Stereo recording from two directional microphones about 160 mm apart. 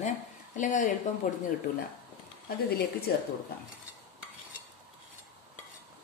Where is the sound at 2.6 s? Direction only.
75° left (ahead or behind).